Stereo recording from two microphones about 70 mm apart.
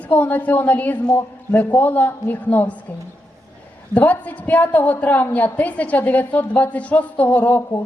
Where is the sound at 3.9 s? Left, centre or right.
Left.